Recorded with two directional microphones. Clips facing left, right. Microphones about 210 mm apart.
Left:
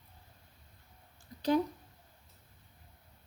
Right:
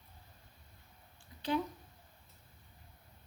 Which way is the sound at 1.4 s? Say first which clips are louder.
Left 6 dB; 40° left (ahead or behind).